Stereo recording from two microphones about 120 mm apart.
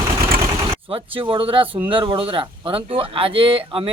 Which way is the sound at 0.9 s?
50° right (ahead or behind).